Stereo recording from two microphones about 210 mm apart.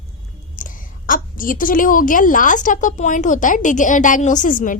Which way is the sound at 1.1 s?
40° left (ahead or behind).